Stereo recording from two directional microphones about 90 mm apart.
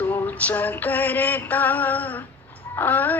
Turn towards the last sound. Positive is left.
turn(degrees=20)  # may be behind; listen again after turning